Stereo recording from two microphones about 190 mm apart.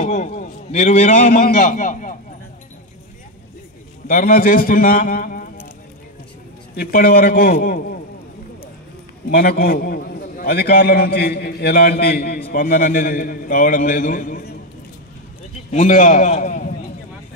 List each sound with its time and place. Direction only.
0.0 s a man's voice: 40° left (ahead or behind)
4.1 s a man's voice: 45° left (ahead or behind)
6.7 s a man's voice: 50° left (ahead or behind)
9.3 s a man's voice: 50° left (ahead or behind)
15.7 s a man's voice: 40° left (ahead or behind)